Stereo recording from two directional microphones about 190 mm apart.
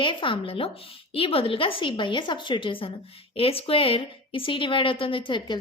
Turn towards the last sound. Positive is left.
turn(degrees=25)  # may be behind; listen again after turning